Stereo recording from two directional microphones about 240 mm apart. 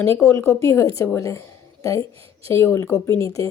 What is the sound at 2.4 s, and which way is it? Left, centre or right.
A woman's voice, centre.